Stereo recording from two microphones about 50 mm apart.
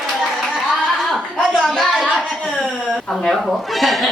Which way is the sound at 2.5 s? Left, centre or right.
Centre.